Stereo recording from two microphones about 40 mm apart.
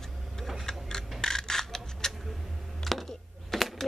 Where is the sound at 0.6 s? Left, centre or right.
Centre.